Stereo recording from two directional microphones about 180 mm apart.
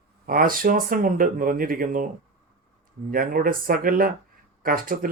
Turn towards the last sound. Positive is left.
turn(degrees=-50)  # may be behind; listen again after turning